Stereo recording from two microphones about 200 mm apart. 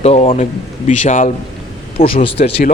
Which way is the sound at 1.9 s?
30° left (ahead or behind).